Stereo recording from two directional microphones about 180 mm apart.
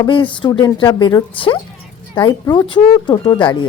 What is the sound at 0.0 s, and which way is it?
Speech, 30° left (ahead or behind).